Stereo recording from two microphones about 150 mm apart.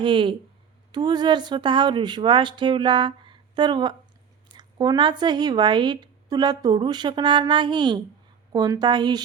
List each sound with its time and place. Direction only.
0.0 s speech: 35° right (ahead or behind)